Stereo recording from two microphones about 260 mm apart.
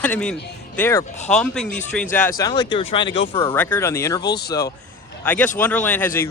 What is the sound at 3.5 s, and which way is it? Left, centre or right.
Speech, centre.